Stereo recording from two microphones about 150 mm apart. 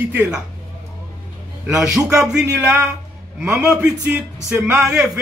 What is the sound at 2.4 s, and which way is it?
A man's voice, 10° right (ahead or behind).